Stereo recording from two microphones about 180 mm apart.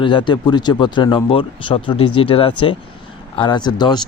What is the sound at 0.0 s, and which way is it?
Speech, 25° left (ahead or behind).